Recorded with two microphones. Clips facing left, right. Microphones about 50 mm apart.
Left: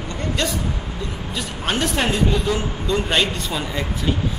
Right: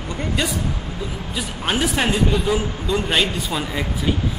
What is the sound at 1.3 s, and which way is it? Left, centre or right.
A man's voice, centre.